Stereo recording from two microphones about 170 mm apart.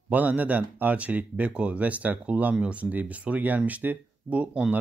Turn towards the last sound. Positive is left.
turn(degrees=-5)  # may be behind; listen again after turning